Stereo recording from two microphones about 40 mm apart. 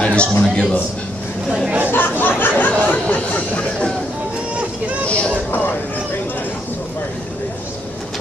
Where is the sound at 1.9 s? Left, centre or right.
Left.